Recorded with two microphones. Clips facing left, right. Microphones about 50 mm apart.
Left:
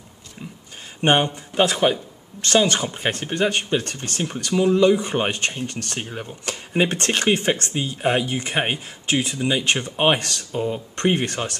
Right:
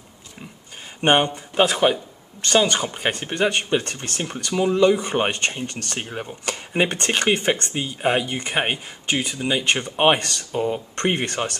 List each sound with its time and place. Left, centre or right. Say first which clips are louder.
1.0 s speech: right 1 dB; centre